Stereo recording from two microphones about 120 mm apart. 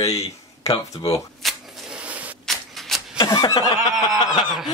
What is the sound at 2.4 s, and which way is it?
Tick-tock, centre (ahead or behind).